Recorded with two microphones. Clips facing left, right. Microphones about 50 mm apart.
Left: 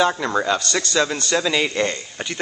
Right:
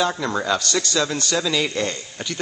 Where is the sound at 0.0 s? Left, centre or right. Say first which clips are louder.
Left 3 dB; centre.